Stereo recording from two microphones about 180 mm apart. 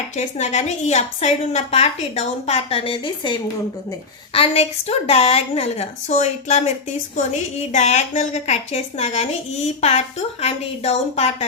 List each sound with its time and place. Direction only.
0.2 s a woman's voice: 40° left (ahead or behind)